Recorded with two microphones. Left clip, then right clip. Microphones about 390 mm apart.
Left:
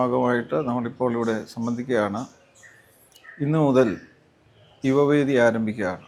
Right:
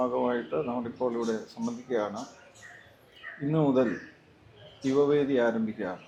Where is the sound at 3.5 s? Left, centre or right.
Left.